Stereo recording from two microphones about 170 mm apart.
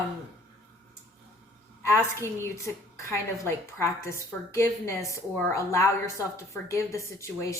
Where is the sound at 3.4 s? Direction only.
15° left (ahead or behind).